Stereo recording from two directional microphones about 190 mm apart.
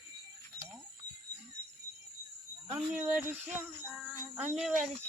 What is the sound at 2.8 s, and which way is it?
Speech, 5° right (ahead or behind).